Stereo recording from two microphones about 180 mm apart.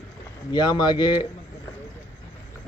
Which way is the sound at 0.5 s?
25° left (ahead or behind).